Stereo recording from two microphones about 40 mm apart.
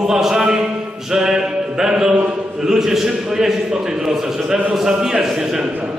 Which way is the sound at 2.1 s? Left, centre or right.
Right.